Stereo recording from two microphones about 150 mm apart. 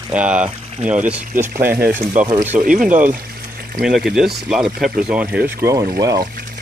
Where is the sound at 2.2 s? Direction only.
55° right (ahead or behind).